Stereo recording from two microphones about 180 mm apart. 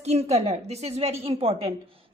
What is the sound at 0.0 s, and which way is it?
Speech, 35° right (ahead or behind).